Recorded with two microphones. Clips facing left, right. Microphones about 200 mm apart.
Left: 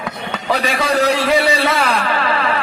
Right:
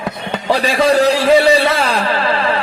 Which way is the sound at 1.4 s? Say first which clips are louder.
Right 4 dB; 30° right (ahead or behind).